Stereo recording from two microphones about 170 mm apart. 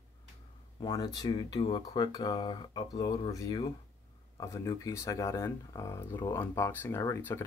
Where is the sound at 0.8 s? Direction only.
25° left (ahead or behind).